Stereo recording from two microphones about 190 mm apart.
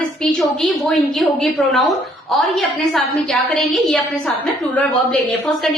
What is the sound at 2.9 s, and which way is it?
A woman's voice, centre (ahead or behind).